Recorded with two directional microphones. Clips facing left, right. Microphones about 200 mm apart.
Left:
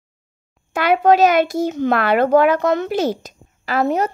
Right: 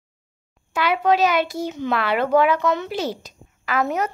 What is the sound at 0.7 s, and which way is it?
A child's voice, 45° left (ahead or behind).